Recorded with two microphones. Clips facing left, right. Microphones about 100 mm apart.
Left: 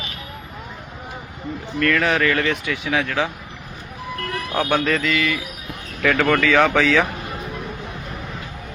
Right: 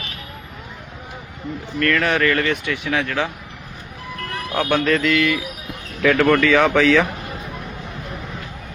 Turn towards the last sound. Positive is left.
turn(degrees=0)  # may be behind; listen again after turning